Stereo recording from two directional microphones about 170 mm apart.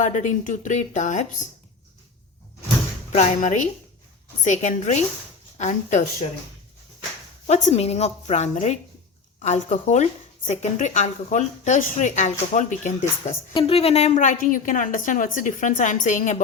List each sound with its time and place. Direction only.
0.0 s a woman's voice: 45° left (ahead or behind)
3.1 s a woman's voice: 45° left (ahead or behind)
7.4 s a woman's voice: 40° left (ahead or behind)
13.5 s a woman's voice: 35° left (ahead or behind)